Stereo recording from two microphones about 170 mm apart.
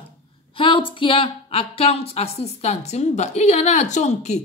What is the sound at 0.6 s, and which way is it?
A woman's voice, 30° left (ahead or behind).